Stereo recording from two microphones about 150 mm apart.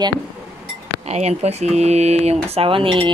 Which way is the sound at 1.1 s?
45° right (ahead or behind).